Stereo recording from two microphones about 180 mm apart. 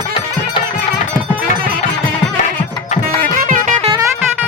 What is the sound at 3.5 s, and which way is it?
Music, 40° right (ahead or behind).